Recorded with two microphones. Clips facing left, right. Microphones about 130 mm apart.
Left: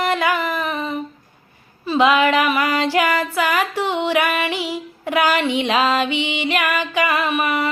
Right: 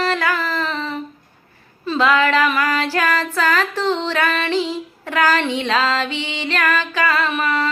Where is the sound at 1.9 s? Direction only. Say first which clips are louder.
Left 1 dB; 15° left (ahead or behind).